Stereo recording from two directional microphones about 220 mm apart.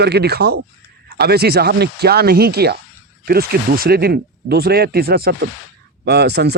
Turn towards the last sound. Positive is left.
turn(degrees=-50)  # may be behind; listen again after turning